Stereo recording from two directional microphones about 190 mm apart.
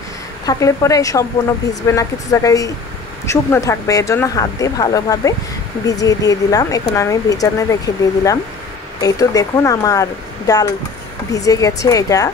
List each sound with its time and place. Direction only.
0.5 s speech: 15° left (ahead or behind)